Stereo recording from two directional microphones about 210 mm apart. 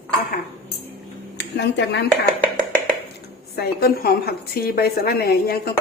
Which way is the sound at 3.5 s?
50° left (ahead or behind).